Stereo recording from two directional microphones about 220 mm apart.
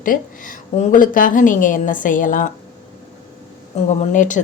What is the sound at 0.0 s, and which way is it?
Speech, 40° left (ahead or behind).